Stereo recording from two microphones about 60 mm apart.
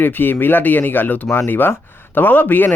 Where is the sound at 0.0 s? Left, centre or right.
Left.